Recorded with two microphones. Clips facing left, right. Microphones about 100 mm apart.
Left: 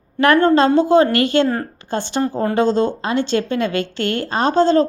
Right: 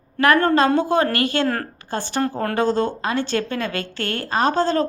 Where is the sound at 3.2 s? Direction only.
45° right (ahead or behind).